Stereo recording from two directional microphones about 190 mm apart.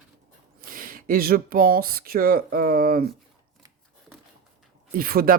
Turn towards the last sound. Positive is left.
turn(degrees=-50)  # may be behind; listen again after turning